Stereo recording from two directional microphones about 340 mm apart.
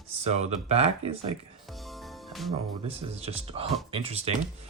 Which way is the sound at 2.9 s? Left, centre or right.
Centre.